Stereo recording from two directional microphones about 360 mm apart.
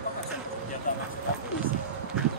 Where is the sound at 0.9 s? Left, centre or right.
Left.